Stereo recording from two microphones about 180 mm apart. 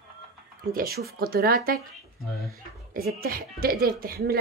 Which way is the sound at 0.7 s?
60° right (ahead or behind).